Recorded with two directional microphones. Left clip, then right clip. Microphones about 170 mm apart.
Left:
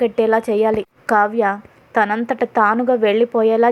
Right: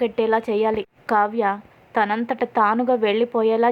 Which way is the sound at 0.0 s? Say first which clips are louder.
Left 4 dB; 20° left (ahead or behind).